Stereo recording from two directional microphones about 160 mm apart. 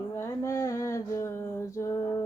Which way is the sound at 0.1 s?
15° left (ahead or behind).